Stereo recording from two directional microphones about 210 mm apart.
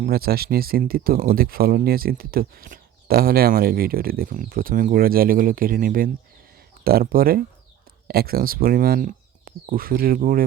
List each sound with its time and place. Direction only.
0.0 s speech: 45° right (ahead or behind)